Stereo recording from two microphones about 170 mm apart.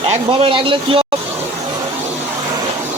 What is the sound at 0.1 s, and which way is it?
Speech, 30° right (ahead or behind).